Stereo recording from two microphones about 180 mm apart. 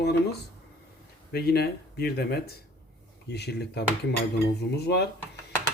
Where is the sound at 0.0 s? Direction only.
65° left (ahead or behind).